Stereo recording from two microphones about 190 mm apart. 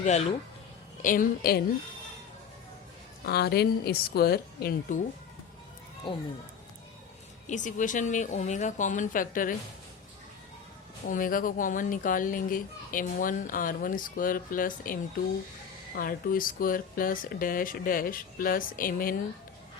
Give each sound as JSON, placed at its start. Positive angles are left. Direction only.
{"t": 0.0, "sound": "speech", "side_deg": 35}
{"t": 3.2, "sound": "a woman's voice", "side_deg": 55}
{"t": 6.1, "sound": "speech", "side_deg": 25}
{"t": 7.4, "sound": "speech", "side_deg": 40}
{"t": 11.0, "sound": "speech", "side_deg": 45}
{"t": 16.0, "sound": "speech", "side_deg": 50}